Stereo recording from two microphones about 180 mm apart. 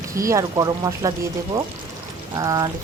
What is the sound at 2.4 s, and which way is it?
Speech, 20° right (ahead or behind).